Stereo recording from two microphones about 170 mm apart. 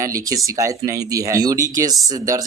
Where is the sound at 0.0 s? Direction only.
20° right (ahead or behind).